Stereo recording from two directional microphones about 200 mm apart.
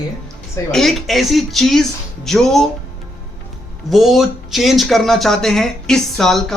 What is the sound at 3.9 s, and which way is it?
Speech, centre (ahead or behind).